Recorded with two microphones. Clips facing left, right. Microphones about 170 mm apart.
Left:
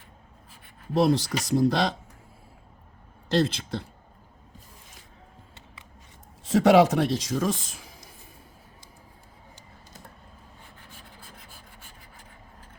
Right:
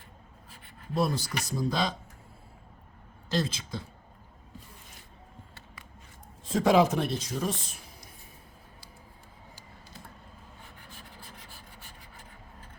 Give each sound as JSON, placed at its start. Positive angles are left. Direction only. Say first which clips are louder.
{"t": 0.9, "sound": "speech", "louder": "left 7 dB", "side_deg": 75}
{"t": 3.4, "sound": "speech", "louder": "left 7 dB", "side_deg": 65}
{"t": 6.4, "sound": "speech", "louder": "left 5 dB", "side_deg": 75}